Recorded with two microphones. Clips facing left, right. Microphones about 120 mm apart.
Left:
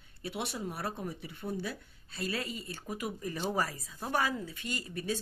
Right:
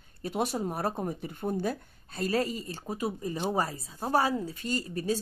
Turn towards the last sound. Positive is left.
turn(degrees=-35)  # may be behind; listen again after turning